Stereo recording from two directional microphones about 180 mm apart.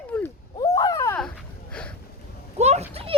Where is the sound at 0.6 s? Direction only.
20° left (ahead or behind).